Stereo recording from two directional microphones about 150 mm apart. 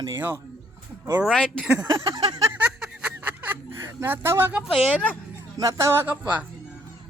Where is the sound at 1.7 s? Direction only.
25° right (ahead or behind).